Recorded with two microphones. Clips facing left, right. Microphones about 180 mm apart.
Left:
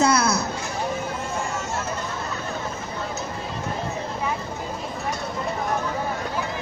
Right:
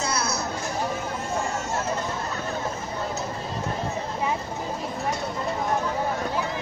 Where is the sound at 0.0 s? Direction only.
70° left (ahead or behind).